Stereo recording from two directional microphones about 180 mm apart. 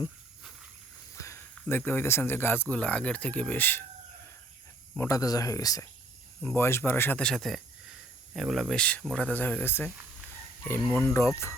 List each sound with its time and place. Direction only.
1.1 s a sound: 15° left (ahead or behind)
1.6 s speech: 10° left (ahead or behind)
4.9 s speech: 20° left (ahead or behind)